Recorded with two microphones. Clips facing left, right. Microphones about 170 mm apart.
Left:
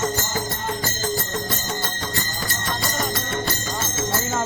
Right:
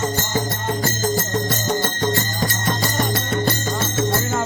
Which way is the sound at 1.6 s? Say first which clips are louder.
Right 7 dB; 50° right (ahead or behind).